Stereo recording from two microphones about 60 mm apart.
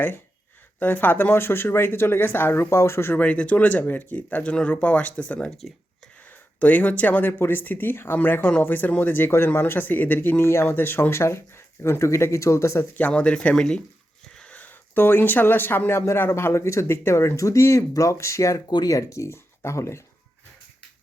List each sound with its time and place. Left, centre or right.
0.8 s speech: left
2.6 s speech: left
3.2 s speech: left
10.4 s speech: left
13.0 s speech: left
16.8 s speech: left